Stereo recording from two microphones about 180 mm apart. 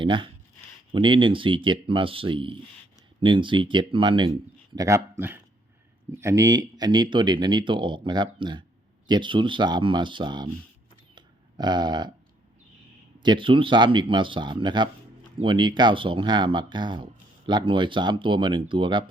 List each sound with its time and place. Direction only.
0.0 s speech: 25° right (ahead or behind)
11.1 s a sound: 25° right (ahead or behind)
13.2 s speech: 25° right (ahead or behind)